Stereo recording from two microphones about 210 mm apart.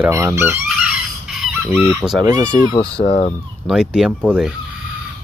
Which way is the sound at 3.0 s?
30° left (ahead or behind).